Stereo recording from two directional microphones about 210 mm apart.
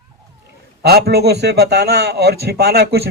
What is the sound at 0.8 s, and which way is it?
A man's voice, 50° right (ahead or behind).